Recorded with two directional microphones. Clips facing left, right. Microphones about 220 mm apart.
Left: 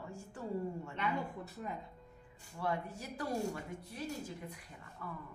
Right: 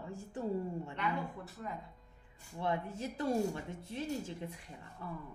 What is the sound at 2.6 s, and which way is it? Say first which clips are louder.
Speech: right 2 dB; 25° right (ahead or behind).